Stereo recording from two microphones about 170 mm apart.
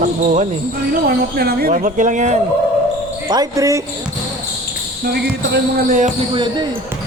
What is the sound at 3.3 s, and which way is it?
Speech, 20° right (ahead or behind).